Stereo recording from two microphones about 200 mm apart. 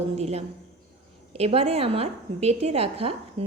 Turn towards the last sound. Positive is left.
turn(degrees=-30)  # may be behind; listen again after turning